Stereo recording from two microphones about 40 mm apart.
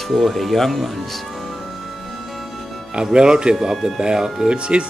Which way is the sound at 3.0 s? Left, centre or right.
Right.